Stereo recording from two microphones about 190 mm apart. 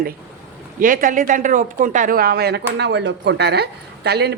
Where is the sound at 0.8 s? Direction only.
45° right (ahead or behind).